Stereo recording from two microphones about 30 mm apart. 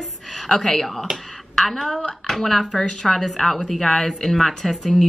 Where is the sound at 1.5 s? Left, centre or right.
Centre.